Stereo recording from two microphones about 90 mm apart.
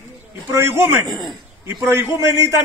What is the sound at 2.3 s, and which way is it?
Speech, 35° right (ahead or behind).